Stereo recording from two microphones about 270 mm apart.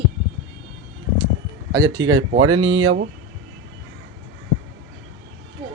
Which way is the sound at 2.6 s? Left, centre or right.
Right.